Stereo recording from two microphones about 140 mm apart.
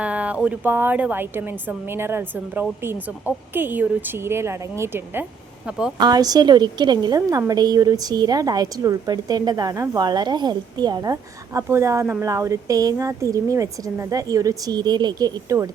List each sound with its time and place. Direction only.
0.0 s a woman's voice: 10° right (ahead or behind)
6.0 s a woman's voice: 30° right (ahead or behind)